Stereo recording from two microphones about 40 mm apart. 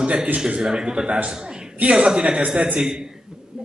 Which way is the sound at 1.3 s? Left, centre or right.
Centre.